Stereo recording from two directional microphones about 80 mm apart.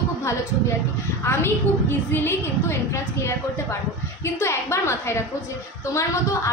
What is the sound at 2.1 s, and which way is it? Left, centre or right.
A woman's voice, left.